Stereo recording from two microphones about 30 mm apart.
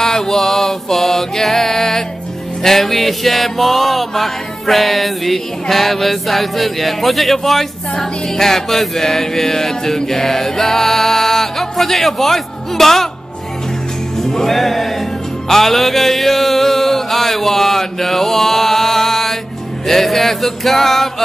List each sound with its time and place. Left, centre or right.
0.0 s mantra: centre
2.6 s music: centre
14.2 s music: centre